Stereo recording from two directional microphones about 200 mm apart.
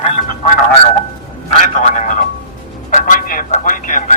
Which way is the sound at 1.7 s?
35° left (ahead or behind).